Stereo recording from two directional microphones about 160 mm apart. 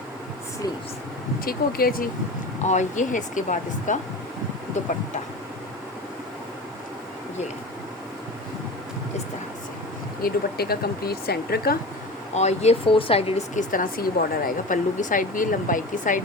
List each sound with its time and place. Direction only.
1.5 s speech: 65° left (ahead or behind)
2.6 s speech: 50° left (ahead or behind)
10.2 s speech: 75° left (ahead or behind)
12.3 s speech: 45° left (ahead or behind)
13.7 s speech: 60° left (ahead or behind)